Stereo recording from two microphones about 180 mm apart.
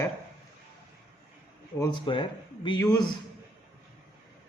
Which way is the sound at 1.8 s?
25° left (ahead or behind).